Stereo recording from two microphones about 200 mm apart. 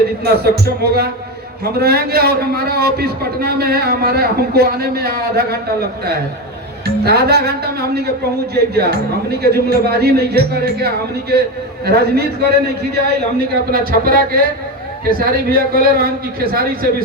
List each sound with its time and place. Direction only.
0.3 s a man's voice: 50° right (ahead or behind)
6.8 s a man's voice: 50° right (ahead or behind)
15.2 s a man's voice: 50° right (ahead or behind)